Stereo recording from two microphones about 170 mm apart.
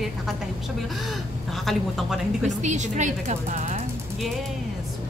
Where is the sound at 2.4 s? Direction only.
45° right (ahead or behind).